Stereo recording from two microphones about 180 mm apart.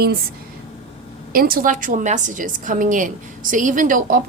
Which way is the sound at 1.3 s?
55° right (ahead or behind).